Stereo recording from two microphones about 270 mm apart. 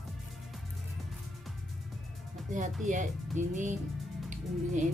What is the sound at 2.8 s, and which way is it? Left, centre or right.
Speech, right.